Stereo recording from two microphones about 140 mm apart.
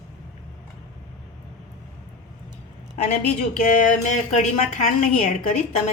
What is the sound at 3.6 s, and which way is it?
A woman's voice, 70° left (ahead or behind).